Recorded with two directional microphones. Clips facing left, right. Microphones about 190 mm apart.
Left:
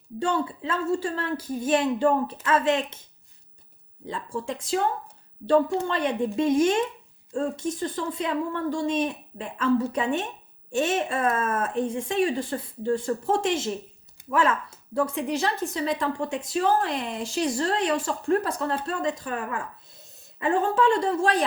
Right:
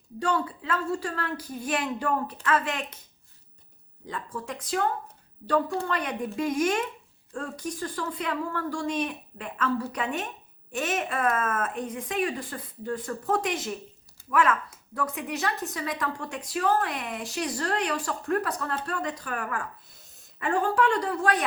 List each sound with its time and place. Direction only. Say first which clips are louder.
0.2 s speech: left 2 dB; 25° left (ahead or behind)
4.0 s speech: left 4 dB; 25° left (ahead or behind)